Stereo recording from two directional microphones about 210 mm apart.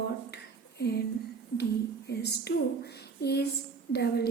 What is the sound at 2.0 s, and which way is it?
A woman's voice, 50° left (ahead or behind).